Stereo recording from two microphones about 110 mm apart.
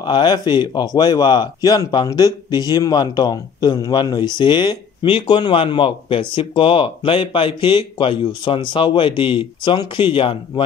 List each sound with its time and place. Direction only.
0.0 s speech: 45° left (ahead or behind)